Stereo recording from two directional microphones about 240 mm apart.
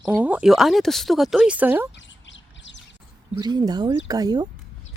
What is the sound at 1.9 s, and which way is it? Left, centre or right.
Bird, left.